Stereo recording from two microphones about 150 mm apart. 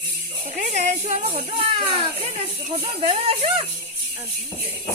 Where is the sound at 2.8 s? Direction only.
40° right (ahead or behind).